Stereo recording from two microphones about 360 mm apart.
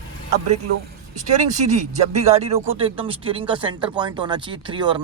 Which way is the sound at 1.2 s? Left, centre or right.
Centre.